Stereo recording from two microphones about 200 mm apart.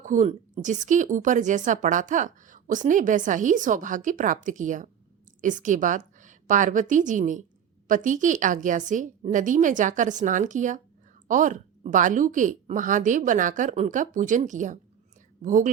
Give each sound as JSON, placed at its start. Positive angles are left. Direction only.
{"t": 0.0, "sound": "a woman's voice", "side_deg": -40}